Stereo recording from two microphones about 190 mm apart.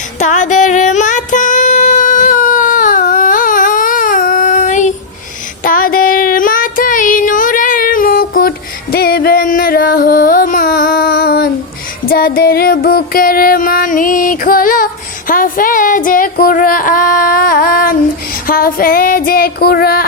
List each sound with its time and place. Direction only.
0.2 s music: 40° left (ahead or behind)
5.6 s child singing: 50° left (ahead or behind)
12.0 s music: 50° left (ahead or behind)
15.3 s a sound: 45° left (ahead or behind)
18.4 s music: 50° left (ahead or behind)